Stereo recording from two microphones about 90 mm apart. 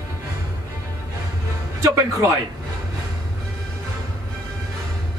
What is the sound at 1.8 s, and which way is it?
Speech, 35° right (ahead or behind).